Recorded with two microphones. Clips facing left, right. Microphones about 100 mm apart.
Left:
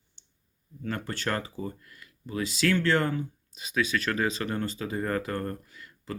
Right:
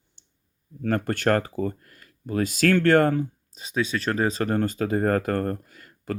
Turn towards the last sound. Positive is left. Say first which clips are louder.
# right 6 dB
turn(degrees=-50)  # may be behind; listen again after turning